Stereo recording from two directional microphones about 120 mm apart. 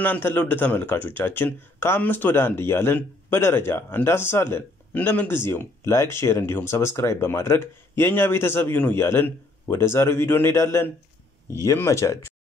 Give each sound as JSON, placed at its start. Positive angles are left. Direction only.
{"t": 0.0, "sound": "speech", "side_deg": 15}